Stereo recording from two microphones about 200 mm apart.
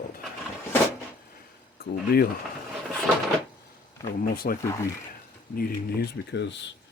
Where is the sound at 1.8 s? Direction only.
50° left (ahead or behind).